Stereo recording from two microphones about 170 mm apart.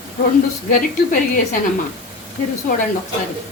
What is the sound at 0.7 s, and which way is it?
Speech, 50° left (ahead or behind).